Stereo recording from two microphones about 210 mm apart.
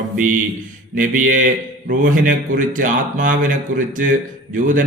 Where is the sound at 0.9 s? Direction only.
40° right (ahead or behind).